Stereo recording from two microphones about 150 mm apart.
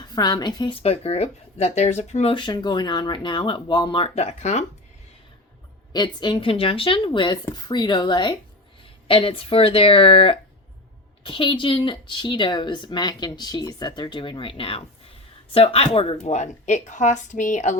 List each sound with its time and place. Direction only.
0.0 s a woman's voice: 25° left (ahead or behind)
0.8 s a woman's voice: 40° left (ahead or behind)
2.3 s speech: 30° left (ahead or behind)
4.1 s a woman's voice: 45° left (ahead or behind)
5.9 s a woman's voice: 30° left (ahead or behind); by 17.7 s 55° left (ahead or behind)